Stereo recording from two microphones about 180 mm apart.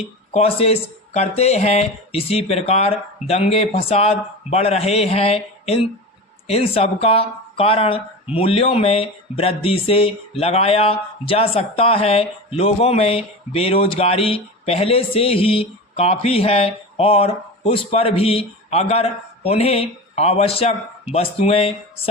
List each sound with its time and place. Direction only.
0.3 s speech: 35° left (ahead or behind)